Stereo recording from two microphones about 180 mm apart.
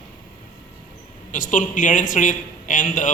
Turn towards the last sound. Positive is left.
turn(degrees=45)  # may be behind; listen again after turning